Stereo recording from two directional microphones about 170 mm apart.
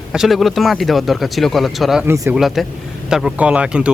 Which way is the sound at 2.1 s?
15° right (ahead or behind).